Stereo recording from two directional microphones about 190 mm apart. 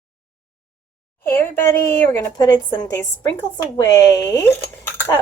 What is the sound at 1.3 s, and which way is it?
A woman's voice, 15° left (ahead or behind).